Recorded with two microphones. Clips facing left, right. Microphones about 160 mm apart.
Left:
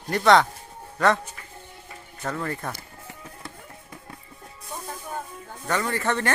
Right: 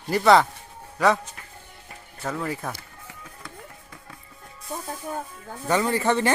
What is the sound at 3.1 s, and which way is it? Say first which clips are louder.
Music: left 3 dB; 30° left (ahead or behind).